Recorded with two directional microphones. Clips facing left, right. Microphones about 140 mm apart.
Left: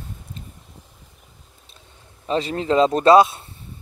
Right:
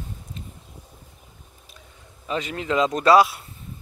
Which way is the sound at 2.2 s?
35° left (ahead or behind).